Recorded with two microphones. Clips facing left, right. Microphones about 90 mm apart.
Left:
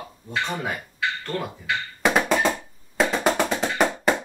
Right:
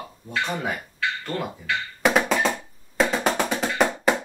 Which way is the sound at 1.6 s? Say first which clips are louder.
Right 1 dB; centre (ahead or behind).